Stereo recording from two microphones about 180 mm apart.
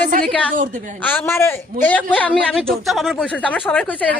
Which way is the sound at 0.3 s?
5° left (ahead or behind).